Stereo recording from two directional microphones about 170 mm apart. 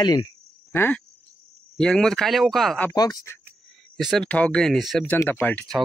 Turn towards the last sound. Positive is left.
turn(degrees=5)  # may be behind; listen again after turning